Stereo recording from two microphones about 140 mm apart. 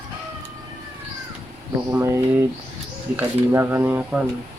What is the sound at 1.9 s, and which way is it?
Speech, 20° right (ahead or behind).